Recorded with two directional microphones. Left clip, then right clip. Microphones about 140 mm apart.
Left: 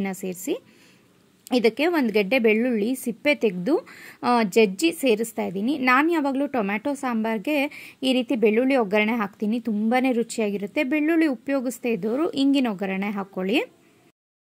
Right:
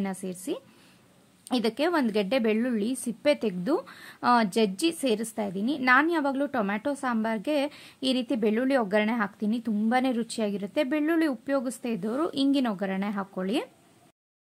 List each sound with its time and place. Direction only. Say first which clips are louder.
0.0 s a woman's voice: left 4 dB; 20° left (ahead or behind)